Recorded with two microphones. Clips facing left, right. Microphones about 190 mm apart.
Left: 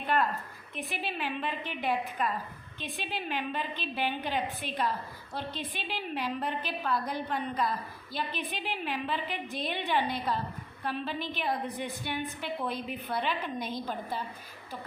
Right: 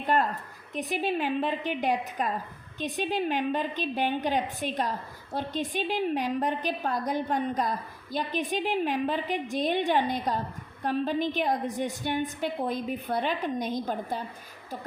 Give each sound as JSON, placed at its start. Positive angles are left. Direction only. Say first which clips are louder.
{"t": 0.0, "sound": "a woman's voice", "louder": "right 3 dB", "side_deg": -45}